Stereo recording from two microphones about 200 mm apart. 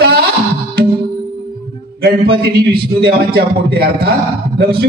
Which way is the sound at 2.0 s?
50° right (ahead or behind).